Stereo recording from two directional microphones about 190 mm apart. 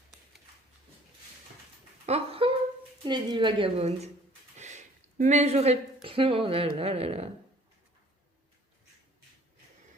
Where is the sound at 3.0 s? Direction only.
25° right (ahead or behind).